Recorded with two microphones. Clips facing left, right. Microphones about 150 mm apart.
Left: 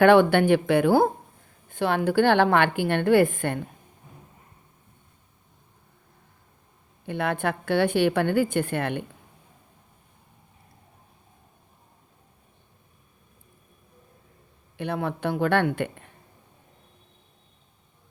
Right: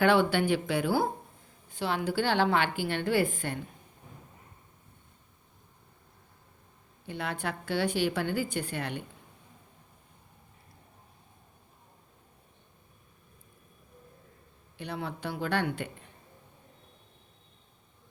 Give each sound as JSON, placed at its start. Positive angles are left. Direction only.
{"t": 0.0, "sound": "a woman's voice", "side_deg": 55}
{"t": 7.1, "sound": "a woman's voice", "side_deg": 60}
{"t": 14.8, "sound": "a woman's voice", "side_deg": 55}